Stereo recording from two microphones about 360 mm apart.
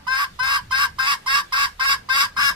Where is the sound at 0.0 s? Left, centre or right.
Centre.